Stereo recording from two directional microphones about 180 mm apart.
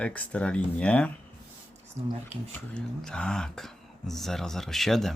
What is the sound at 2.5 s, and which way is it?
Speech, 5° left (ahead or behind).